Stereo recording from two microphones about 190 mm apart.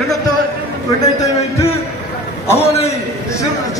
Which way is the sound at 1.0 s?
15° left (ahead or behind).